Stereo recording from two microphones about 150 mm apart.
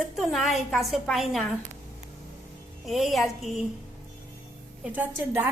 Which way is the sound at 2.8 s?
Centre (ahead or behind).